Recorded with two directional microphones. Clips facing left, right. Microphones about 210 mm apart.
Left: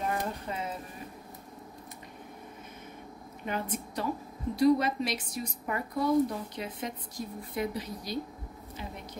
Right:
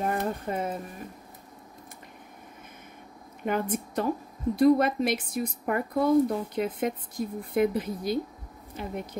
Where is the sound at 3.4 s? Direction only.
50° right (ahead or behind).